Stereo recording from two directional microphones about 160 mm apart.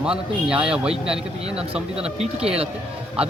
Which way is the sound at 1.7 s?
40° right (ahead or behind).